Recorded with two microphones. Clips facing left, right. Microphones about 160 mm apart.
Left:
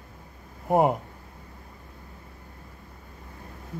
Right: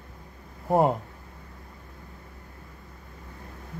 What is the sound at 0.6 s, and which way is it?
Speech, 5° left (ahead or behind).